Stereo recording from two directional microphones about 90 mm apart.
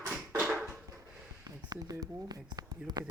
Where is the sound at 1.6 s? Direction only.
45° right (ahead or behind).